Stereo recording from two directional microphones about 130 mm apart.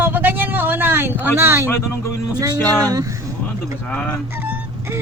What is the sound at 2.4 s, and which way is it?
Speech, 30° right (ahead or behind).